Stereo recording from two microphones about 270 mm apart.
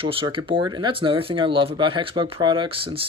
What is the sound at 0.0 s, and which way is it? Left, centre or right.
Speech, centre.